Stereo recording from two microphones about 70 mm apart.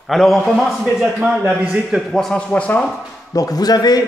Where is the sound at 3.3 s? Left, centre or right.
Left.